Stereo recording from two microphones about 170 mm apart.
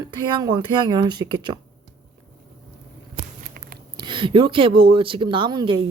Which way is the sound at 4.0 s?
30° right (ahead or behind).